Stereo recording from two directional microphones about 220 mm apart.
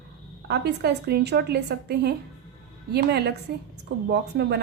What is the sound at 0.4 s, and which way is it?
A woman's voice, 50° right (ahead or behind).